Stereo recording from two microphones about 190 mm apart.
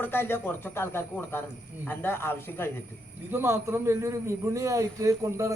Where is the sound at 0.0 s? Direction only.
10° left (ahead or behind).